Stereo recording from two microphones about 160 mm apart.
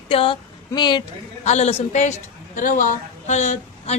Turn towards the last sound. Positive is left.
turn(degrees=45)  # may be behind; listen again after turning